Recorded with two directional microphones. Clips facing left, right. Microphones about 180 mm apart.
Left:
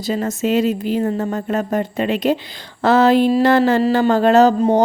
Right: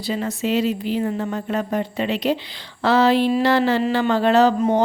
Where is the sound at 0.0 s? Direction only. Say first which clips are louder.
Left 4 dB; 45° left (ahead or behind).